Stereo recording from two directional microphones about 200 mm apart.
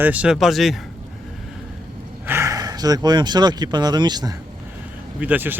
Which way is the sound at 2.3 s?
15° right (ahead or behind).